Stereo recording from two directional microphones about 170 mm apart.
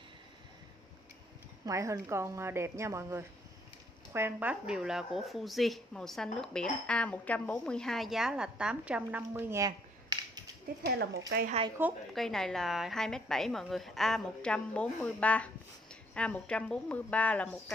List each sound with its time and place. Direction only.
1.7 s a woman's voice: 20° right (ahead or behind)
10.8 s speech: 70° right (ahead or behind)
12.1 s speech: centre (ahead or behind)